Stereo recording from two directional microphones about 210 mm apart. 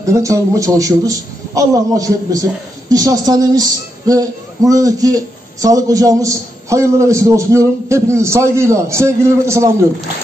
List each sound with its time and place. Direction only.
0.0 s a man's voice: 15° right (ahead or behind)